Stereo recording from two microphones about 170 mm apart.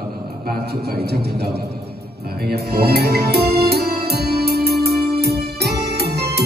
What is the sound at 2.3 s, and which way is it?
Music, 65° right (ahead or behind).